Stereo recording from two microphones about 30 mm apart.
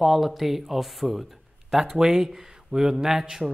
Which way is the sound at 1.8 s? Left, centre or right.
Centre.